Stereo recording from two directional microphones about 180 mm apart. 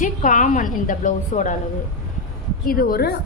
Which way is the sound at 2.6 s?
50° left (ahead or behind).